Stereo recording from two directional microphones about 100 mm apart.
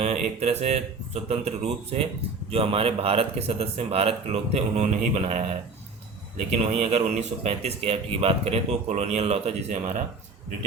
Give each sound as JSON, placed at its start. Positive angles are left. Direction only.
{"t": 0.0, "sound": "a man's voice", "side_deg": -90}
{"t": 2.5, "sound": "speech", "side_deg": -75}
{"t": 6.7, "sound": "a man's voice", "side_deg": -90}